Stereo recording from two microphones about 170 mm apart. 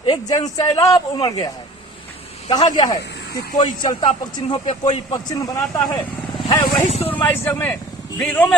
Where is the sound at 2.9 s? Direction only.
85° left.